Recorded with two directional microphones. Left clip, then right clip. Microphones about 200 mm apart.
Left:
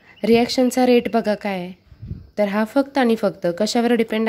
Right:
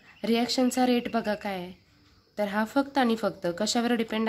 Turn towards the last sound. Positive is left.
turn(degrees=30)  # may be behind; listen again after turning